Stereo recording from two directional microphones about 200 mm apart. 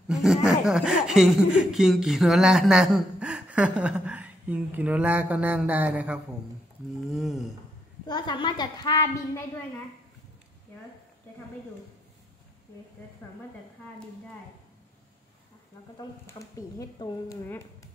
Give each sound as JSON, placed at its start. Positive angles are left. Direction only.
{"t": 0.1, "sound": "speech", "side_deg": 0}
{"t": 7.1, "sound": "a sound", "side_deg": 0}
{"t": 8.1, "sound": "a woman's voice", "side_deg": 20}
{"t": 13.2, "sound": "speech", "side_deg": 10}
{"t": 16.0, "sound": "speech", "side_deg": 15}